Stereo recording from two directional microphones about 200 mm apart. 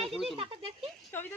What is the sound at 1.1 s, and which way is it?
Speech, 10° left (ahead or behind).